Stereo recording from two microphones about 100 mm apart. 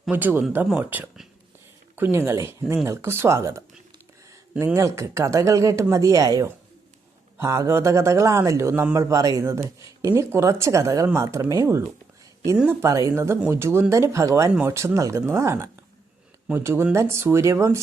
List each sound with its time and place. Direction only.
0.1 s a man's voice: 20° right (ahead or behind)
4.6 s a man's voice: 30° right (ahead or behind)